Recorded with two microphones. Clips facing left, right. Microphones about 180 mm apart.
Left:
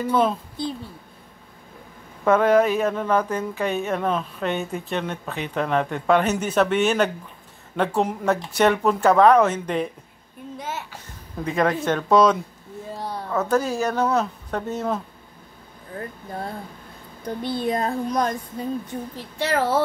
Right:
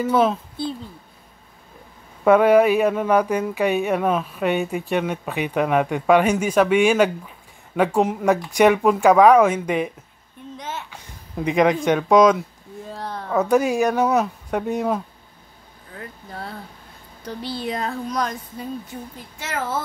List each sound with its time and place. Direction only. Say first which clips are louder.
0.0 s a woman's voice: right 2 dB; 5° right (ahead or behind)
2.2 s speech: right 3 dB; 10° right (ahead or behind)
10.6 s a woman's voice: even; 5° left (ahead or behind)
11.4 s speech: right 4 dB; 15° right (ahead or behind)
12.9 s speech: even; 15° left (ahead or behind)
13.3 s speech: right 4 dB; 15° right (ahead or behind)
16.0 s speech: left 3 dB; 50° left (ahead or behind)
19.3 s a woman's voice: left 6 dB; 35° left (ahead or behind)